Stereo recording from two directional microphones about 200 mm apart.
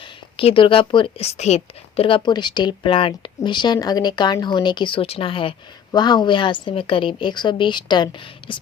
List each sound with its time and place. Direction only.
0.3 s a woman's voice: 25° left (ahead or behind)